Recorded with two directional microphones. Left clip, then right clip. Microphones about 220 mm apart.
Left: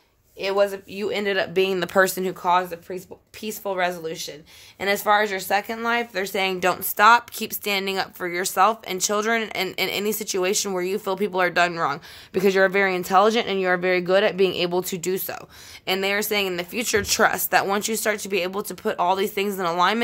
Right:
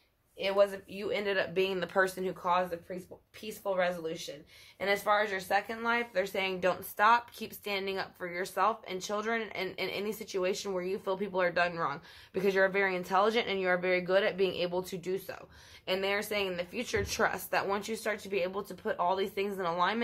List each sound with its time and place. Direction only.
0.4 s speech: 40° left (ahead or behind)